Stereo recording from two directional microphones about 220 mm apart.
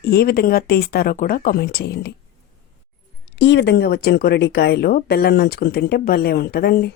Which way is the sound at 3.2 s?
55° left (ahead or behind).